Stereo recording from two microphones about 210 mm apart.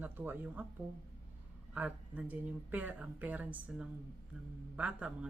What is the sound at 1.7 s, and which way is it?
Speech, 5° right (ahead or behind).